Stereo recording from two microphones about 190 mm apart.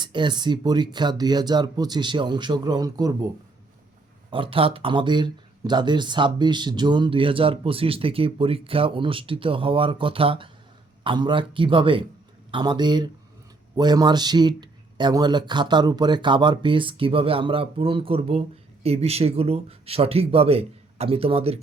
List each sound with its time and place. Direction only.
0.0 s speech: 25° right (ahead or behind)